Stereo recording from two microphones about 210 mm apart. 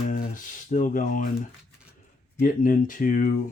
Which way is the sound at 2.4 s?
40° left (ahead or behind).